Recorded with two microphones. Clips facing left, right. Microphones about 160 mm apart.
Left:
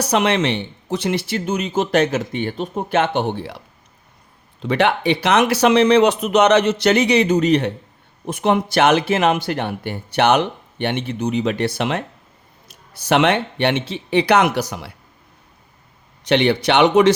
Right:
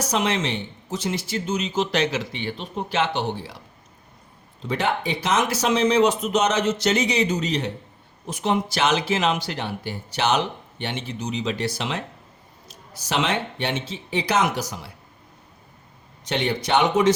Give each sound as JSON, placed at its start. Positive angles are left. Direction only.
{"t": 0.0, "sound": "speech", "side_deg": 65}
{"t": 4.6, "sound": "speech", "side_deg": 70}
{"t": 16.2, "sound": "speech", "side_deg": 70}